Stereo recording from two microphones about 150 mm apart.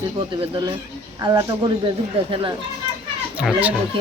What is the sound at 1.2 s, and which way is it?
Speech, 25° right (ahead or behind).